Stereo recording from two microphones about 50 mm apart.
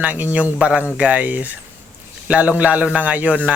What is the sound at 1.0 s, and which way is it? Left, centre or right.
Speech, right.